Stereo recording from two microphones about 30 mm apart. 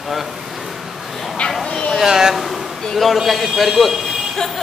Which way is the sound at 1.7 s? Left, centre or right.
Centre.